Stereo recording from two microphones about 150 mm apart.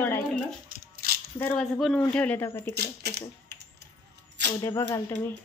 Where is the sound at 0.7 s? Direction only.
80° right.